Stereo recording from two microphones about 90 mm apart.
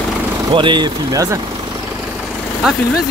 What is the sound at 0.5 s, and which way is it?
Speech, 60° right (ahead or behind).